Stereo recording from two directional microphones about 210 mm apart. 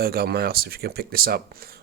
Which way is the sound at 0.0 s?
45° right (ahead or behind).